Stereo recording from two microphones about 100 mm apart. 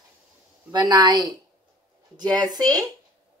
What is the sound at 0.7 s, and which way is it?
Speech, 45° right (ahead or behind).